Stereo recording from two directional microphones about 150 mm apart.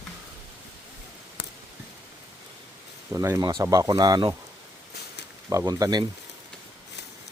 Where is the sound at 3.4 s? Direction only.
30° right (ahead or behind).